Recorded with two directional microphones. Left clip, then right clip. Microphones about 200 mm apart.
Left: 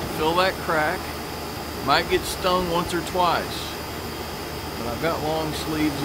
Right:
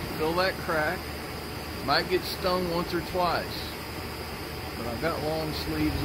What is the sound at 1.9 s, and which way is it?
Speech, centre (ahead or behind).